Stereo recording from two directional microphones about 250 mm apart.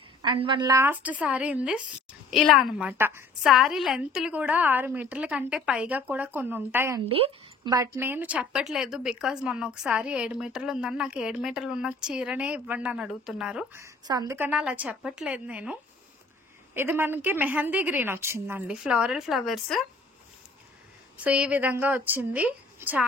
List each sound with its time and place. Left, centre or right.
0.2 s a woman's voice: centre
7.1 s a woman's voice: right; by 19.9 s centre
21.2 s a woman's voice: centre